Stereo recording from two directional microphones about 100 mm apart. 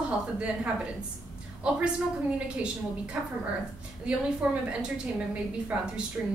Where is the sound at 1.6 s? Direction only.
10° right (ahead or behind).